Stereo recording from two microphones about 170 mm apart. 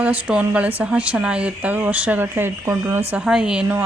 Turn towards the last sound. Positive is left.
turn(degrees=-10)  # may be behind; listen again after turning